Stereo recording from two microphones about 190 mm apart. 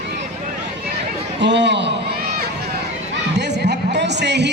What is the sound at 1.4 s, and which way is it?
Speech, 65° right (ahead or behind).